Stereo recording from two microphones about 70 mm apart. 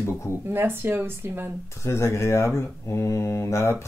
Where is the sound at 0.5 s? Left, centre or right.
Right.